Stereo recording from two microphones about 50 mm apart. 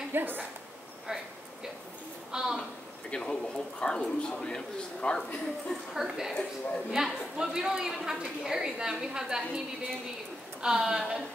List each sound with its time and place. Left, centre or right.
0.1 s a woman's voice: right
1.0 s a sound: centre
2.3 s a woman's voice: centre
3.1 s speech: centre
5.9 s a woman's voice: centre